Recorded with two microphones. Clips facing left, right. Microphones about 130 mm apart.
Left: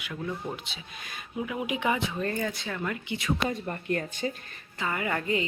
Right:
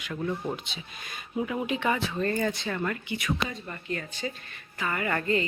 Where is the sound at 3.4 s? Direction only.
50° left (ahead or behind).